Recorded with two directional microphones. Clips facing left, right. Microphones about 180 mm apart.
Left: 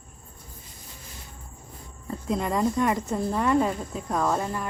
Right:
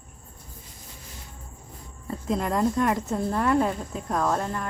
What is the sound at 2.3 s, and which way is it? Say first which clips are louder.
Speech: right 1 dB; centre (ahead or behind).